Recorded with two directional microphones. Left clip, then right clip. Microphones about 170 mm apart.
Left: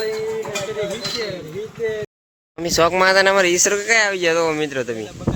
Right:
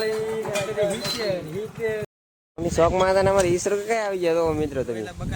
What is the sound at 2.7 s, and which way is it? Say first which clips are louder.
Speech: left 5 dB; 10° left (ahead or behind).